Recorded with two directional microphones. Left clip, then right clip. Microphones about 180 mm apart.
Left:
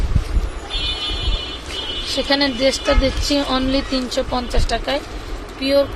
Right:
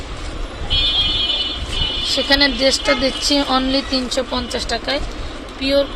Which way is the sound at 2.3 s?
10° left (ahead or behind).